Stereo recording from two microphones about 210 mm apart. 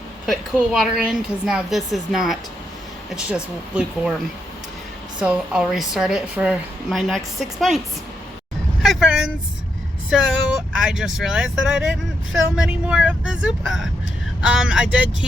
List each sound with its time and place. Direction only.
0.3 s speech: centre (ahead or behind)
5.2 s speech: 5° right (ahead or behind)
8.8 s vehicle: centre (ahead or behind)
10.1 s speech: 5° right (ahead or behind)